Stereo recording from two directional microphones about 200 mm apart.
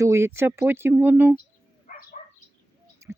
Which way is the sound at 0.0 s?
15° right (ahead or behind).